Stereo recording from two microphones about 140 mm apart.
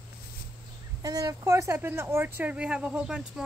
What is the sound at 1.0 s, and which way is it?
Speech, 25° right (ahead or behind).